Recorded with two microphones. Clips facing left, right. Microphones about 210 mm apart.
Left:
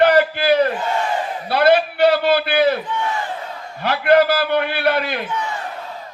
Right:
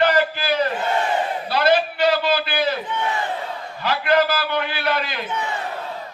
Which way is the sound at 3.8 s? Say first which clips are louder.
Left 5 dB; 60° left (ahead or behind).